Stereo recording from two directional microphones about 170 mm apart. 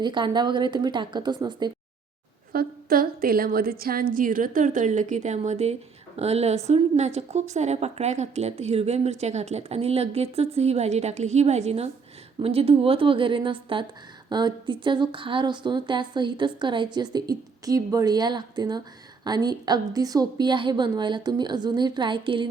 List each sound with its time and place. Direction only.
0.0 s a woman's voice: 25° right (ahead or behind)
2.5 s a woman's voice: 60° right (ahead or behind); by 22.4 s 30° right (ahead or behind)